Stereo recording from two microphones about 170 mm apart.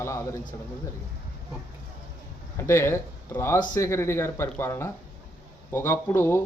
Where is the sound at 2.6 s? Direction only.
15° left (ahead or behind).